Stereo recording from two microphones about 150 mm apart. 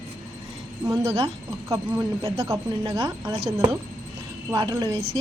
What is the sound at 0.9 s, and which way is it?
Speech, 15° right (ahead or behind).